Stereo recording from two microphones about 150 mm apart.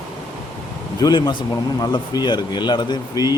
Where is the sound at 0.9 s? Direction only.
25° left (ahead or behind).